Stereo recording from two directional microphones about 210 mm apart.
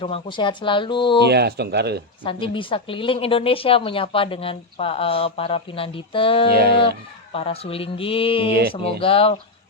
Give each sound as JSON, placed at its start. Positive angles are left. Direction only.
{"t": 0.0, "sound": "a woman's voice", "side_deg": 25}
{"t": 1.3, "sound": "speech", "side_deg": -50}
{"t": 2.2, "sound": "a woman's voice", "side_deg": 25}
{"t": 6.5, "sound": "speech", "side_deg": -45}
{"t": 7.3, "sound": "a woman's voice", "side_deg": 30}